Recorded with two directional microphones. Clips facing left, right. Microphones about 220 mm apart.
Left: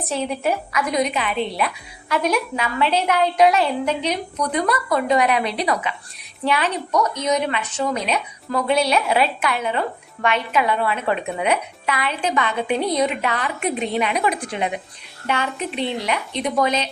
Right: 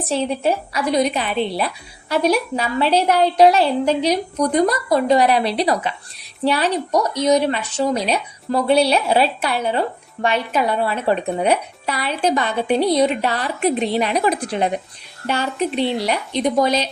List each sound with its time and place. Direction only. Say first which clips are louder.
0.1 s a woman's voice: right 3 dB; 30° right (ahead or behind)
15.8 s a woman's voice: right 1 dB; 35° right (ahead or behind)